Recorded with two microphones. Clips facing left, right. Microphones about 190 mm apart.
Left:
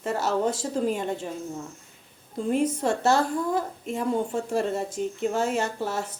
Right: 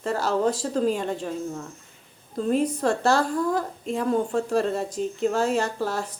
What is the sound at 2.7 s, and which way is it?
Speech, 25° left (ahead or behind).